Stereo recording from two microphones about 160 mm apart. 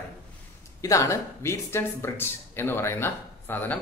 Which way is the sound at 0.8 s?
20° left (ahead or behind).